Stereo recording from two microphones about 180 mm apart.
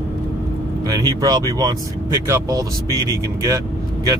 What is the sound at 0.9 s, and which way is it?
Speech, 20° right (ahead or behind).